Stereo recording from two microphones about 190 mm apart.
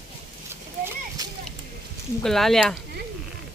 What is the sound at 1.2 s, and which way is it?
Speech, 20° right (ahead or behind).